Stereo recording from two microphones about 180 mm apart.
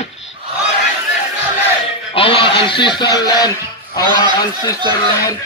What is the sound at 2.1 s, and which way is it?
A man's voice, 30° left (ahead or behind).